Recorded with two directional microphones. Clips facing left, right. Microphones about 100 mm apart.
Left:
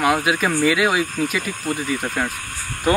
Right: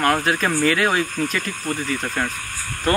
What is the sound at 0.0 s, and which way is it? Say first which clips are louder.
Speech: left 1 dB; 5° left (ahead or behind).